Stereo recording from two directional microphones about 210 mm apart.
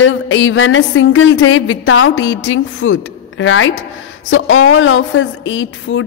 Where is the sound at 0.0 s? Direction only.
65° left (ahead or behind).